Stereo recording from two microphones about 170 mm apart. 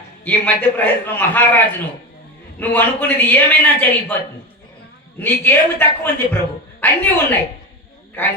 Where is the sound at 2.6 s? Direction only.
10° left (ahead or behind).